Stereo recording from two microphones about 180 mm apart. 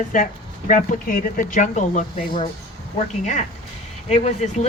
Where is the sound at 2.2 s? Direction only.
25° left (ahead or behind).